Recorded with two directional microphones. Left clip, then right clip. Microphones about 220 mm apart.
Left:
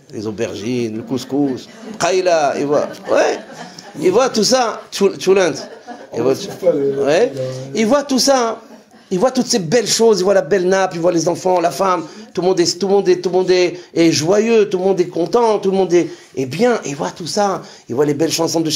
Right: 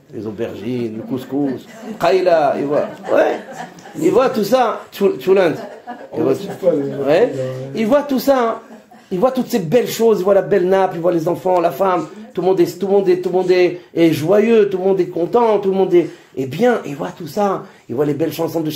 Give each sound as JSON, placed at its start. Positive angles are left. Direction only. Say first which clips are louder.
{"t": 0.2, "sound": "a man's voice", "louder": "left 2 dB", "side_deg": 35}